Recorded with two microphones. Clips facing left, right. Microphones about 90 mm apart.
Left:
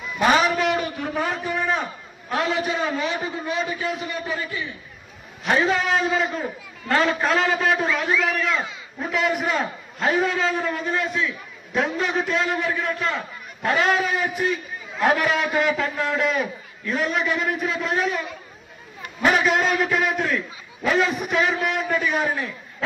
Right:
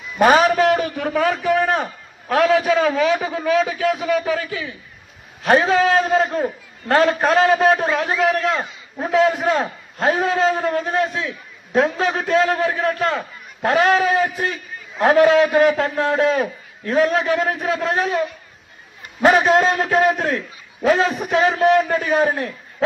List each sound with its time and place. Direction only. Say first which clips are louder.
0.2 s a man's voice: right 5 dB; 50° right (ahead or behind); by 1.8 s 75° right (ahead or behind)
1.8 s a man's voice: right 3 dB; 65° right (ahead or behind); by 4.7 s 80° right
5.4 s a man's voice: right 6 dB; 40° right (ahead or behind)
9.6 s a man's voice: right 3 dB; 50° right (ahead or behind)
10.3 s a man's voice: right 5 dB; 35° right (ahead or behind)
10.7 s a man's voice: right 5 dB; 50° right (ahead or behind)
15.2 s a man's voice: right 8 dB; 55° right (ahead or behind)
15.7 s a man's voice: right 5 dB; 40° right (ahead or behind)
19.2 s a man's voice: right 5 dB; 35° right (ahead or behind)